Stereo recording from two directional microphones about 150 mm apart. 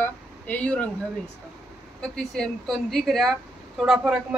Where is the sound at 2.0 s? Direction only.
5° left (ahead or behind).